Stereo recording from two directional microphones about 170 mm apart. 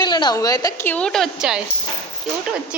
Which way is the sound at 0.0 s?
25° left (ahead or behind).